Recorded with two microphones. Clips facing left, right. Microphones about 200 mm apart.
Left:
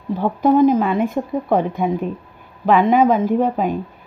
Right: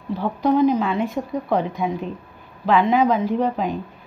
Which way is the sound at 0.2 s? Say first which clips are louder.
Left 4 dB; 50° left (ahead or behind).